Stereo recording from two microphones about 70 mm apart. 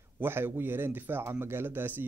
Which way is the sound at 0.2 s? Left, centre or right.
Right.